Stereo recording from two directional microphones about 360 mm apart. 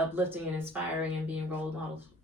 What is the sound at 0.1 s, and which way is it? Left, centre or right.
Speech, centre.